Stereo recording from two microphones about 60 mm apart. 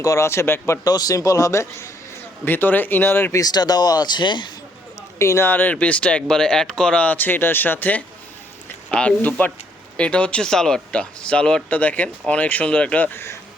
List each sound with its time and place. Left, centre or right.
0.0 s speech: left
0.9 s a man's voice: left
2.4 s speech: left
3.3 s speech: left
5.4 s speech: left
5.7 s speech: left
8.9 s speech: centre
13.1 s speech: left